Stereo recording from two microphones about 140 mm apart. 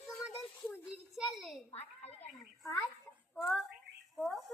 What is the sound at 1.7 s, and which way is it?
Speech, 50° left (ahead or behind).